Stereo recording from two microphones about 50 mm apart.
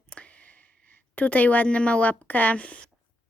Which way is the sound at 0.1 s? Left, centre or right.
Left.